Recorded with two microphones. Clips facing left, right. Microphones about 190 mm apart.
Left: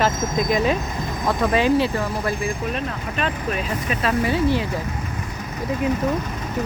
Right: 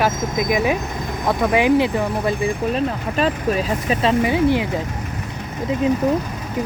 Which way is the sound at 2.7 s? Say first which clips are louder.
Right 6 dB; 35° right (ahead or behind).